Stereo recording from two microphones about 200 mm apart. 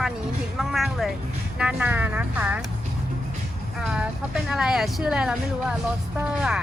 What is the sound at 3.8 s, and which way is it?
A woman's voice, 5° right (ahead or behind).